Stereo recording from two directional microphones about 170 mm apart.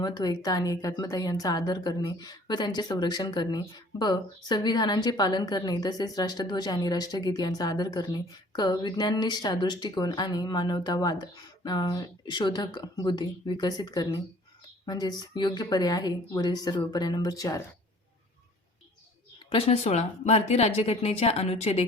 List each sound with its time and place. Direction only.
0.0 s a woman's voice: 25° left (ahead or behind)
19.5 s a woman's voice: 35° left (ahead or behind)